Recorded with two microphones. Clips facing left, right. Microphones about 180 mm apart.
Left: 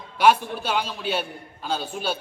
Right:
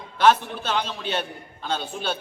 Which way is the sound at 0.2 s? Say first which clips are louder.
Even; 10° left (ahead or behind).